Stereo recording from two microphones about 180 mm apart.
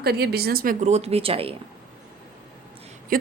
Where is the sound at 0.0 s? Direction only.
60° right (ahead or behind); by 1.5 s 30° right (ahead or behind).